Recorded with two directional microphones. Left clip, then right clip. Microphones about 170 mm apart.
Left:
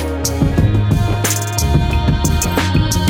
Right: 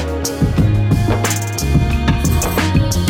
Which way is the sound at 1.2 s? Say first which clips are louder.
Left 1 dB; centre (ahead or behind).